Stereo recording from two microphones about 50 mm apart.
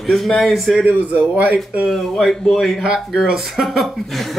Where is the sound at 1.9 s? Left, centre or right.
Centre.